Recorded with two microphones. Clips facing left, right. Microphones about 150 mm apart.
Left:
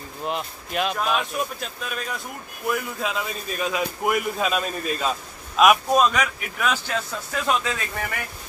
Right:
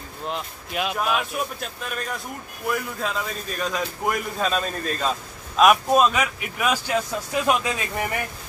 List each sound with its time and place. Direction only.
0.3 s a man's voice: 5° right (ahead or behind)